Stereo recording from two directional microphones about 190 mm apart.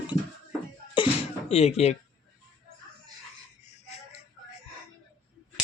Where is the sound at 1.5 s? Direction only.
35° left (ahead or behind).